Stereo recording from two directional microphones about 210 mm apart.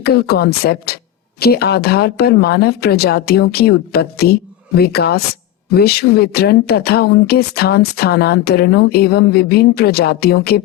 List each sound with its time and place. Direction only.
0.0 s speech: 50° left (ahead or behind)